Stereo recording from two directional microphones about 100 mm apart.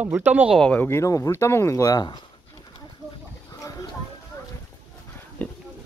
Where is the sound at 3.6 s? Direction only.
35° left (ahead or behind).